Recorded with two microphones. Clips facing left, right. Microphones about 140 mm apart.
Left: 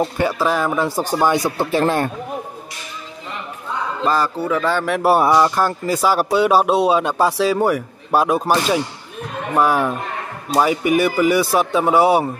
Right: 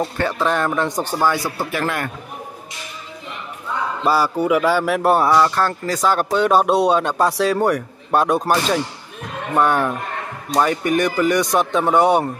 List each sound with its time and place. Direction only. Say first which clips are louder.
0.0 s a man's voice: left 2 dB; 10° left (ahead or behind)
1.2 s speech: left 3 dB; 20° left (ahead or behind)
4.0 s speech: right 1 dB; 10° right (ahead or behind)
9.6 s speech: left 1 dB; 5° left (ahead or behind)